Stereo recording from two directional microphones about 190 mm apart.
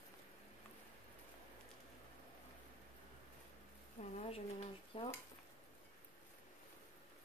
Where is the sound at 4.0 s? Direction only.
35° left (ahead or behind).